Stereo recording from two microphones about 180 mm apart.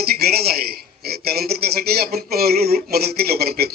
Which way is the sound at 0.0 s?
60° right (ahead or behind).